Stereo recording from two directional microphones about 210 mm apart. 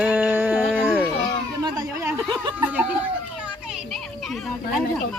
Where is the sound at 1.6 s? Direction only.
20° right (ahead or behind).